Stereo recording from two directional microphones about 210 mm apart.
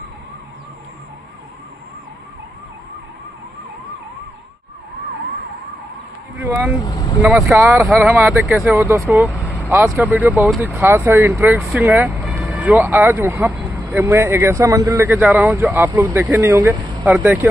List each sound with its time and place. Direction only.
6.9 s speech: 15° left (ahead or behind)
7.4 s speech: 5° right (ahead or behind)
11.8 s music: 10° right (ahead or behind)
12.8 s speech: 10° right (ahead or behind)
17.0 s speech: 10° right (ahead or behind)